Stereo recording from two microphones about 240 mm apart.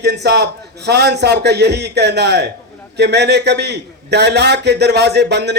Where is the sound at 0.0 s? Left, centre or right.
Right.